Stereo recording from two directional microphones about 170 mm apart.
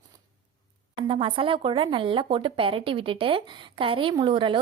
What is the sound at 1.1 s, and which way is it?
A woman's voice, 30° right (ahead or behind).